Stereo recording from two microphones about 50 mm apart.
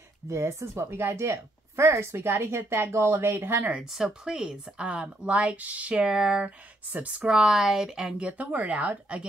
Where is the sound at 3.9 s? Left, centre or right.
Centre.